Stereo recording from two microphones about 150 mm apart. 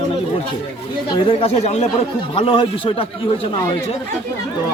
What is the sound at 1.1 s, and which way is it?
Speech, 35° left (ahead or behind).